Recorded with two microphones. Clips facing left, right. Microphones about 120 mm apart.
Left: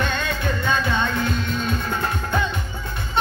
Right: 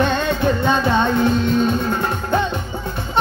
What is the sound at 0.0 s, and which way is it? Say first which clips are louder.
Music: right 7 dB; 30° right (ahead or behind).